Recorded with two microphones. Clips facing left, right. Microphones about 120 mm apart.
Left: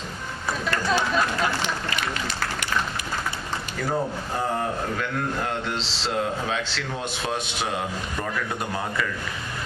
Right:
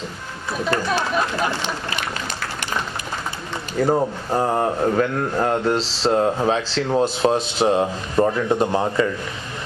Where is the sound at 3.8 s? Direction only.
35° right (ahead or behind).